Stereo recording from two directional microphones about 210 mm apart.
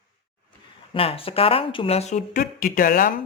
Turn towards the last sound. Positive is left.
turn(degrees=40)  # may be behind; listen again after turning